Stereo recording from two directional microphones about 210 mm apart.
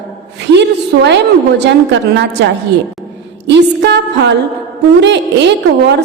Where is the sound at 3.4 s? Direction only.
55° right (ahead or behind).